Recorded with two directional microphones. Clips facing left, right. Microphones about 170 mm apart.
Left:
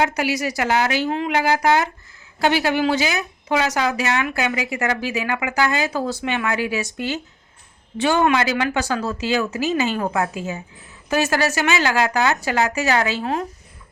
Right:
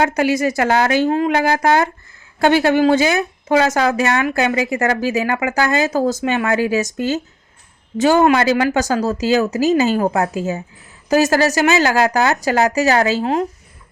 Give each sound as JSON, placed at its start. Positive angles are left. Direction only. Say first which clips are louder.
{"t": 0.0, "sound": "speech", "louder": "right 5 dB", "side_deg": -50}